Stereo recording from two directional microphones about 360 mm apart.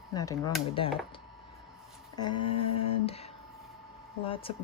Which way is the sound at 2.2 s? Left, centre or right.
Centre.